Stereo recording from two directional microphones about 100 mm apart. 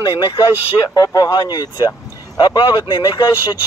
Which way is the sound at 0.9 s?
40° left (ahead or behind).